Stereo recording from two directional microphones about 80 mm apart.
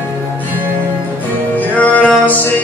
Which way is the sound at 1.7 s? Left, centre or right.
Centre.